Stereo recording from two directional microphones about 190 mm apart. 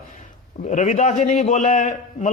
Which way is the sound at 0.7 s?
40° left (ahead or behind).